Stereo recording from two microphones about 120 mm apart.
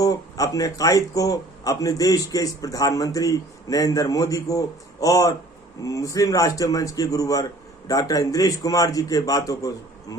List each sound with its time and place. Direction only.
0.0 s speech: 30° left (ahead or behind)